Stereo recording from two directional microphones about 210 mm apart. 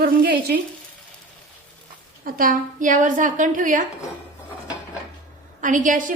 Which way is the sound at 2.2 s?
40° right (ahead or behind).